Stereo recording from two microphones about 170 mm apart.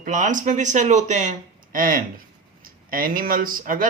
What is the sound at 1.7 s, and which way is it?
Speech, 55° right (ahead or behind).